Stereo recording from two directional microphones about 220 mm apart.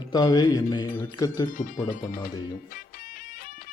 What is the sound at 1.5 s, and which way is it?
Speech, 40° left (ahead or behind).